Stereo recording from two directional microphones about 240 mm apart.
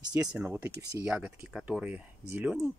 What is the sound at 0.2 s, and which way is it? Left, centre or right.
Speech, centre.